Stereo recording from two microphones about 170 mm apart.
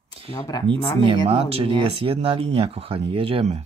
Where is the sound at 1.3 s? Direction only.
35° right (ahead or behind).